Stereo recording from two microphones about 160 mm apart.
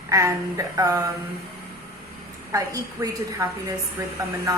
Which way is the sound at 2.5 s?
20° right (ahead or behind).